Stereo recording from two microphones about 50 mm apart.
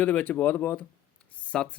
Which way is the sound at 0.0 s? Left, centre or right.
Left.